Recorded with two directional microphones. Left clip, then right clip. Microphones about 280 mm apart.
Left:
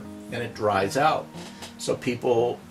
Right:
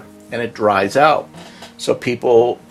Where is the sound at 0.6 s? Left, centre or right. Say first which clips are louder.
Right 9 dB; centre.